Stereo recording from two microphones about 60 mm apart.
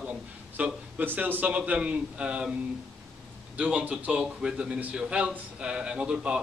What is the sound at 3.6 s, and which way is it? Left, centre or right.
A man's voice, right.